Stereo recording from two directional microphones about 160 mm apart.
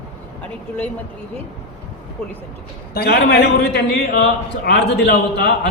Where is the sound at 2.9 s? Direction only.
85° left.